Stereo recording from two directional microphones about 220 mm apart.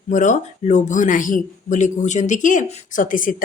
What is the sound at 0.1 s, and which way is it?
Speech, 35° left (ahead or behind).